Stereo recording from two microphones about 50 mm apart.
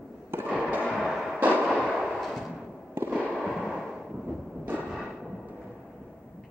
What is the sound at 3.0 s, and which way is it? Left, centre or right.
Fireworks, right.